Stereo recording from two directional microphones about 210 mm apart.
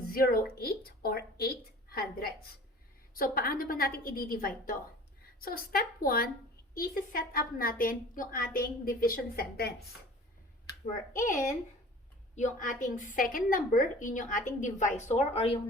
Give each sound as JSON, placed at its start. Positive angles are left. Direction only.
{"t": 0.1, "sound": "a woman's voice", "side_deg": 45}
{"t": 10.8, "sound": "a woman's voice", "side_deg": 40}
{"t": 12.4, "sound": "a woman's voice", "side_deg": 35}